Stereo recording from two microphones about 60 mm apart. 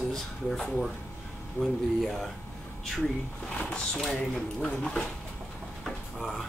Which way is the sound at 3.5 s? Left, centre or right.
Centre.